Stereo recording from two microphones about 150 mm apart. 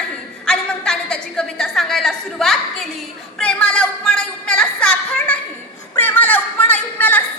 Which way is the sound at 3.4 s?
5° left (ahead or behind).